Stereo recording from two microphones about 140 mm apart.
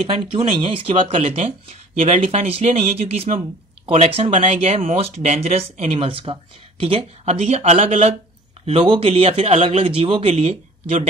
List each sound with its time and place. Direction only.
0.2 s speech: 35° right (ahead or behind)
0.6 s speech: 45° right (ahead or behind)